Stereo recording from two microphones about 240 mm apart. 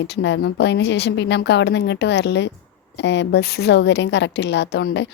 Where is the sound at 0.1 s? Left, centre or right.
Left.